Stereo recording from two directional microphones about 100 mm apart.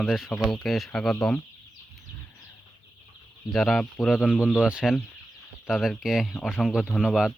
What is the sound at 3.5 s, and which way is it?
Speech, centre (ahead or behind).